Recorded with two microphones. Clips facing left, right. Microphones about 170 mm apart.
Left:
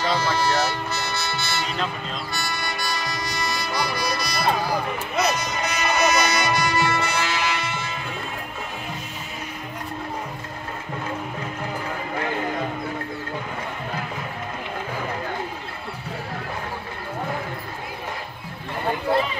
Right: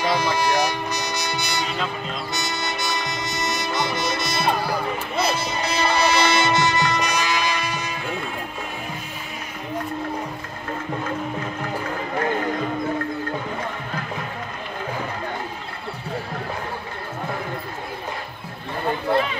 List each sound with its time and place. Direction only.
0.0 s speech: 15° right (ahead or behind)
2.3 s music: 20° right (ahead or behind)